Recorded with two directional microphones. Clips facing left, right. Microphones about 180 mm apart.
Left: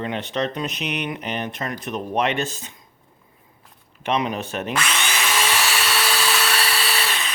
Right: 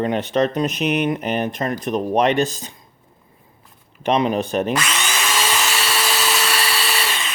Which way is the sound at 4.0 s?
35° right (ahead or behind).